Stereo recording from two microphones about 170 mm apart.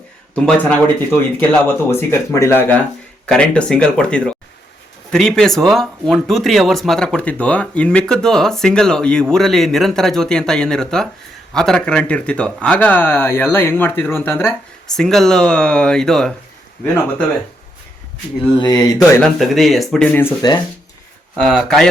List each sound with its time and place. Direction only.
0.3 s speech: 10° left (ahead or behind)
14.9 s speech: 5° left (ahead or behind)
18.5 s a sound: 25° left (ahead or behind)
19.1 s speech: centre (ahead or behind)
20.4 s a sound: 25° left (ahead or behind)
21.3 s speech: 5° left (ahead or behind)